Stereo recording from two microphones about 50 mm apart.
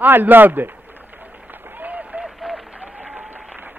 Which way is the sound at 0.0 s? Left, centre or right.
Right.